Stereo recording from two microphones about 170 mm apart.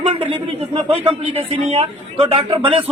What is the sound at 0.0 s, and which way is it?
A man's voice, 30° right (ahead or behind).